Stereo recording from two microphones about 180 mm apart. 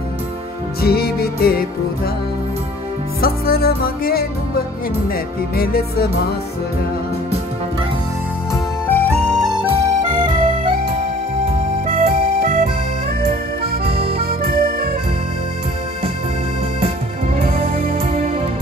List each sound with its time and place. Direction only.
0.7 s music: 60° left (ahead or behind)
3.2 s music: 55° left (ahead or behind)
8.8 s music: 10° left (ahead or behind)
9.3 s music: centre (ahead or behind)
9.7 s music: 25° right (ahead or behind)
12.1 s music: 50° right (ahead or behind)
14.1 s accordion: 55° right (ahead or behind)
17.4 s music: 35° right (ahead or behind)
17.6 s music: 50° right (ahead or behind)